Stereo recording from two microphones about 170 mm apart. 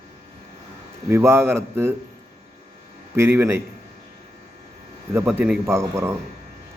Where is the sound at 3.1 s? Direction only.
15° right (ahead or behind).